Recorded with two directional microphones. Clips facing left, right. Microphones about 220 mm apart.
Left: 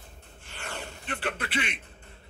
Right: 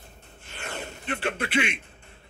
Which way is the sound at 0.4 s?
20° right (ahead or behind).